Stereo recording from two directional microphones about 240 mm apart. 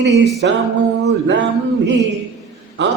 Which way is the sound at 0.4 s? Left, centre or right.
Right.